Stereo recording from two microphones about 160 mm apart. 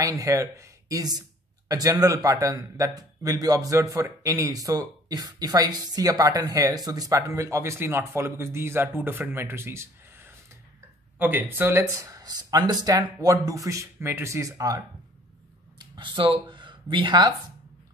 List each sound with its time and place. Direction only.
0.0 s a man's voice: 20° right (ahead or behind)
15.8 s speech: 30° right (ahead or behind)